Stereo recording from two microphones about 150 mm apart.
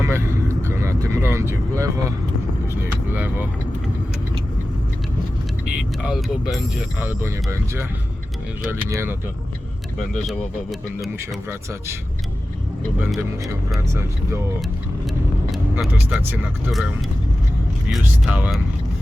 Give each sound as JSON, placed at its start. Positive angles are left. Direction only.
{"t": 0.0, "sound": "vehicle", "side_deg": -15}
{"t": 5.6, "sound": "speech", "side_deg": -5}
{"t": 7.0, "sound": "speech", "side_deg": -15}
{"t": 10.0, "sound": "speech", "side_deg": 0}
{"t": 11.4, "sound": "speech", "side_deg": -15}
{"t": 13.9, "sound": "speech", "side_deg": -20}
{"t": 15.9, "sound": "speech", "side_deg": -10}
{"t": 17.8, "sound": "speech", "side_deg": -10}